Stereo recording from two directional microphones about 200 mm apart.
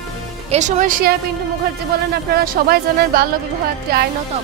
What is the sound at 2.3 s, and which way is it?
Speech, 50° right (ahead or behind).